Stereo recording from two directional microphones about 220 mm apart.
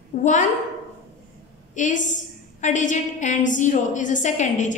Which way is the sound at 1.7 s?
35° left (ahead or behind).